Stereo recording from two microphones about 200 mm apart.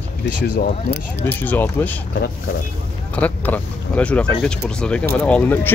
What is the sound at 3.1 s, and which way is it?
Speech, 10° left (ahead or behind).